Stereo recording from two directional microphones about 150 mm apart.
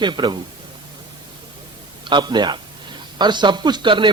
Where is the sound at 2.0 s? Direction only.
30° right (ahead or behind).